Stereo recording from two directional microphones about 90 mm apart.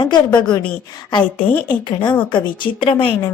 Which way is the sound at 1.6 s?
60° left (ahead or behind).